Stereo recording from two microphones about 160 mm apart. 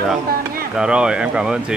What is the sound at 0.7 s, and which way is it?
Speech, 5° right (ahead or behind).